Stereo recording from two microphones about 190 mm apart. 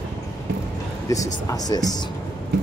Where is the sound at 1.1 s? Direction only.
20° left (ahead or behind).